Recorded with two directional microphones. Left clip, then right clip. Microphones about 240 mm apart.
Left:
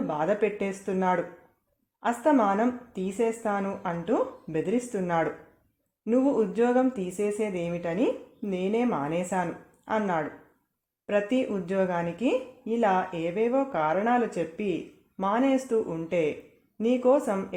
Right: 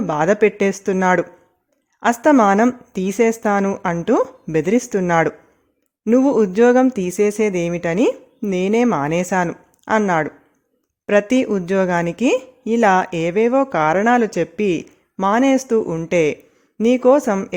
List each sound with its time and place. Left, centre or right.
0.1 s speech: right